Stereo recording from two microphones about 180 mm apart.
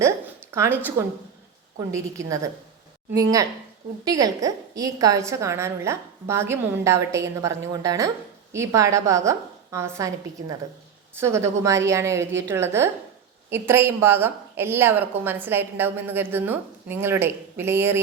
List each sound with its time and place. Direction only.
0.5 s speech: 15° right (ahead or behind)
1.9 s a woman's voice: 15° right (ahead or behind)
4.0 s a woman's voice: 20° right (ahead or behind)
11.1 s a woman's voice: 15° right (ahead or behind)